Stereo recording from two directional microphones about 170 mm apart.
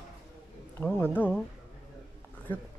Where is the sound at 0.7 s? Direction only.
10° left (ahead or behind).